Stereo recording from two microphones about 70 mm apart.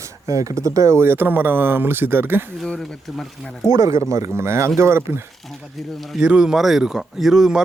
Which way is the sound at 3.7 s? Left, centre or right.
Right.